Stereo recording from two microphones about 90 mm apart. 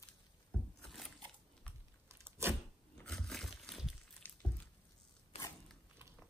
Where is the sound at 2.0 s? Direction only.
25° right (ahead or behind).